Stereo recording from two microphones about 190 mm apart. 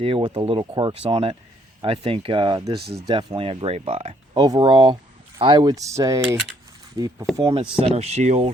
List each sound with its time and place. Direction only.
0.0 s speech: 25° right (ahead or behind)
4.4 s speech: 20° right (ahead or behind)